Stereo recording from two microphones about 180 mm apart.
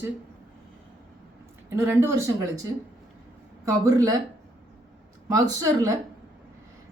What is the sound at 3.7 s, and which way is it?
Speech, 20° right (ahead or behind).